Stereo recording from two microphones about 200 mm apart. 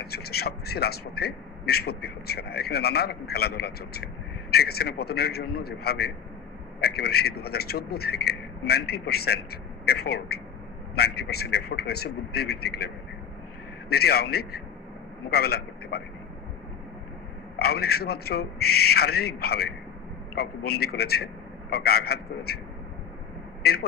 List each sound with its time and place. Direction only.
0.0 s a man's voice: 50° left (ahead or behind)
13.9 s a man's voice: 50° left (ahead or behind)
17.6 s a man's voice: 50° left (ahead or behind)